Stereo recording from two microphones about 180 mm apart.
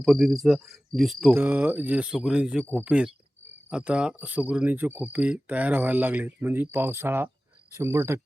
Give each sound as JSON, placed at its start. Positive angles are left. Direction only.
{"t": 0.0, "sound": "speech", "side_deg": 0}
{"t": 1.3, "sound": "speech", "side_deg": -10}